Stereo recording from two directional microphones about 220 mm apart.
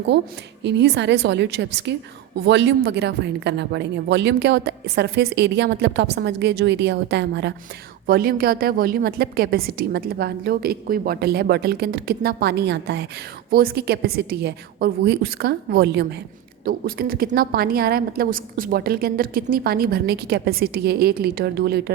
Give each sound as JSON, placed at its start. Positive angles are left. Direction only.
{"t": 0.1, "sound": "a woman's voice", "side_deg": -50}